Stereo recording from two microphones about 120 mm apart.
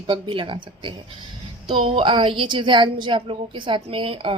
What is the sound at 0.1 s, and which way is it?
Speech, 45° right (ahead or behind).